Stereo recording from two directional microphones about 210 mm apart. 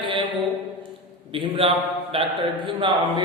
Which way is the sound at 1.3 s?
25° right (ahead or behind).